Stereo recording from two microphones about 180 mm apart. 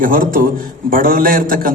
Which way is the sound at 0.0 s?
50° right (ahead or behind).